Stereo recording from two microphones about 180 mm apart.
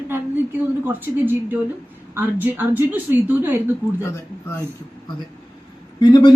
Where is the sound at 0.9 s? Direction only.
10° right (ahead or behind).